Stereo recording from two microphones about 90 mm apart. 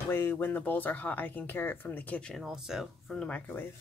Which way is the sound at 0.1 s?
25° left (ahead or behind).